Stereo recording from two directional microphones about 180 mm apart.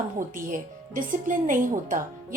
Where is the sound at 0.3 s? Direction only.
50° right (ahead or behind).